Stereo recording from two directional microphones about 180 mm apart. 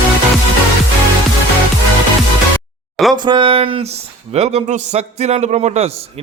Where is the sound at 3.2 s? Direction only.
25° right (ahead or behind).